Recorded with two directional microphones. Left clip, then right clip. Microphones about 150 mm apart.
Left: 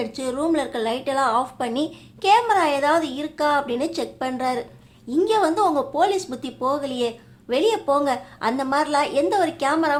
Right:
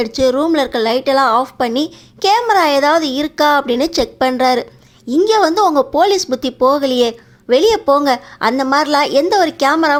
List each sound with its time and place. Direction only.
0.2 s a woman's voice: 35° right (ahead or behind)